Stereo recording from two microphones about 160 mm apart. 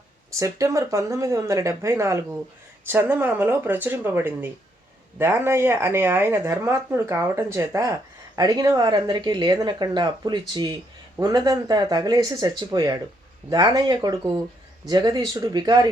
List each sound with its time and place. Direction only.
0.3 s speech: 20° right (ahead or behind)